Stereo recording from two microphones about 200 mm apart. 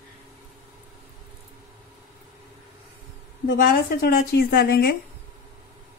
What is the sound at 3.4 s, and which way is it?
A woman's voice, 55° left (ahead or behind).